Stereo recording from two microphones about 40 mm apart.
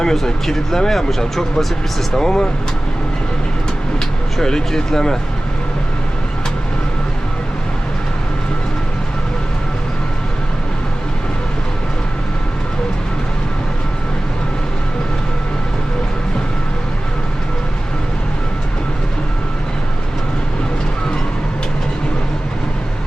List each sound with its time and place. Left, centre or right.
0.0 s speech: centre
4.4 s speech: centre